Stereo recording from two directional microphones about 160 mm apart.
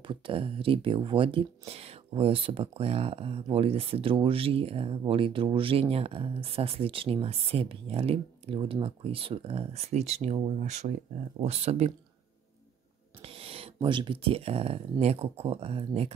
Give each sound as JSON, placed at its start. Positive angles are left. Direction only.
{"t": 0.1, "sound": "speech", "side_deg": -35}
{"t": 13.2, "sound": "speech", "side_deg": -35}